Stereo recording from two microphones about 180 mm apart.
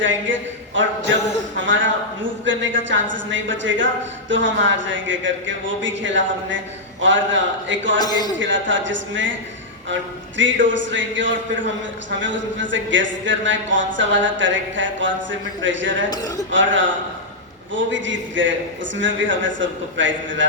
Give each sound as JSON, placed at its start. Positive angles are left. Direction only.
{"t": 0.0, "sound": "a woman's voice", "side_deg": -90}
{"t": 7.9, "sound": "a man's voice", "side_deg": 20}
{"t": 8.4, "sound": "speech", "side_deg": -90}
{"t": 16.0, "sound": "a man's voice", "side_deg": 20}
{"t": 16.5, "sound": "speech", "side_deg": -90}